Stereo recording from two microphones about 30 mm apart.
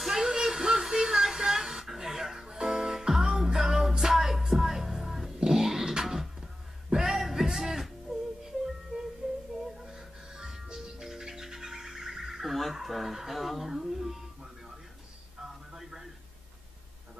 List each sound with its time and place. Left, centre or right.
0.0 s music: centre
9.2 s music: centre
9.7 s music: centre
12.4 s fowl: centre
13.7 s music: centre
15.4 s a sound: centre